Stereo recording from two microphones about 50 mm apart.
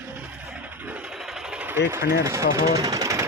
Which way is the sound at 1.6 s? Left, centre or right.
Right.